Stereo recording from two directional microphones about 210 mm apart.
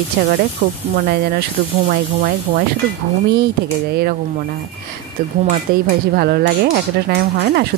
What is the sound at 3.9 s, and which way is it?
Speech, 50° right (ahead or behind).